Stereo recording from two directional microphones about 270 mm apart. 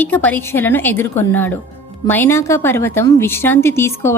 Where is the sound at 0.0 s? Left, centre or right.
Centre.